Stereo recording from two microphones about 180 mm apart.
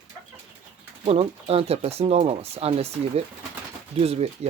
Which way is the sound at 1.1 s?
35° right (ahead or behind).